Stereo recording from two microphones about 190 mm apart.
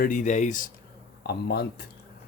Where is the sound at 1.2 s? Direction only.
60° left (ahead or behind).